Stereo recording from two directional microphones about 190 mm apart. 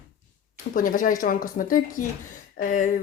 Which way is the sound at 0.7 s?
45° left (ahead or behind).